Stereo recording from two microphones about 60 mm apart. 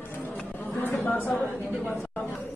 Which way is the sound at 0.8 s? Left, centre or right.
Left.